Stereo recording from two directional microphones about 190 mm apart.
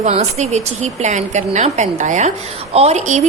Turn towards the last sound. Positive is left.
turn(degrees=-35)  # may be behind; listen again after turning